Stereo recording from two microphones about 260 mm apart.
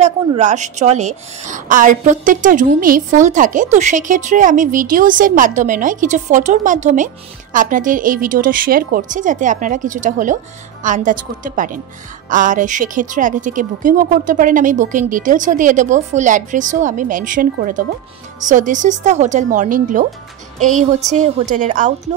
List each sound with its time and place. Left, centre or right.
0.0 s a woman's voice: right